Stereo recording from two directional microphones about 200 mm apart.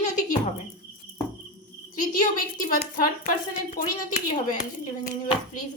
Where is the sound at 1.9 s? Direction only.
45° left (ahead or behind).